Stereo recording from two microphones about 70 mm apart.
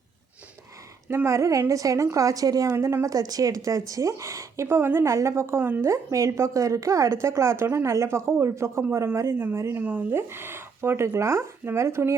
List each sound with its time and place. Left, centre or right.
1.0 s a woman's voice: right